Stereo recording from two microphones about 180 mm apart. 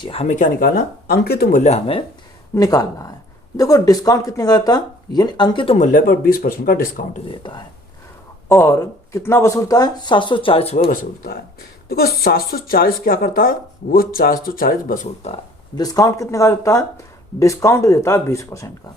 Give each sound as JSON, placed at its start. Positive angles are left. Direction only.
{"t": 0.0, "sound": "speech", "side_deg": 35}
{"t": 2.6, "sound": "speech", "side_deg": 20}
{"t": 5.7, "sound": "speech", "side_deg": 45}
{"t": 7.3, "sound": "speech", "side_deg": 25}
{"t": 10.8, "sound": "speech", "side_deg": 50}
{"t": 15.7, "sound": "speech", "side_deg": 20}